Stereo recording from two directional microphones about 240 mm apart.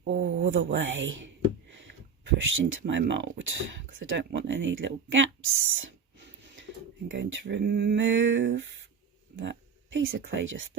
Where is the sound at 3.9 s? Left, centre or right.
Right.